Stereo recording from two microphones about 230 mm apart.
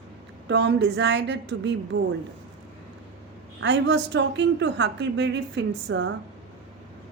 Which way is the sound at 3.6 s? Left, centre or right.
Right.